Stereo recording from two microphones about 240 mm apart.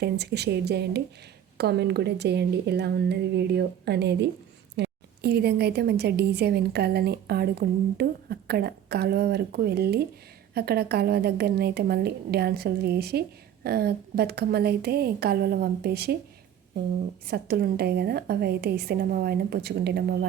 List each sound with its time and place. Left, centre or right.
0.0 s a woman's voice: right
17.2 s a woman's voice: right